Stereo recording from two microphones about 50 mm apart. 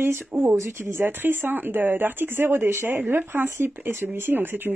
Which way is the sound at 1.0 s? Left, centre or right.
Right.